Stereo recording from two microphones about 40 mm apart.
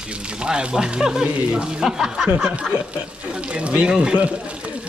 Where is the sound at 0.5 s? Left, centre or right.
Right.